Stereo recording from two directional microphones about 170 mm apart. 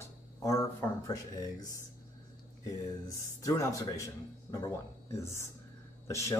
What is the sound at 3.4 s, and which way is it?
Speech, 20° left (ahead or behind).